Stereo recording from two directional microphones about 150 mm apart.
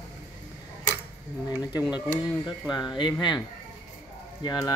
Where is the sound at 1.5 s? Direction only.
25° left (ahead or behind).